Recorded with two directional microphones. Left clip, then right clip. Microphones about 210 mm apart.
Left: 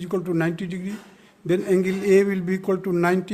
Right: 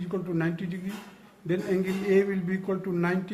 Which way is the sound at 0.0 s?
55° left (ahead or behind).